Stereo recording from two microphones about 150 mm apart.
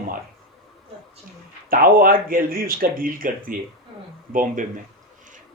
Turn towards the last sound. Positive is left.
turn(degrees=-60)  # may be behind; listen again after turning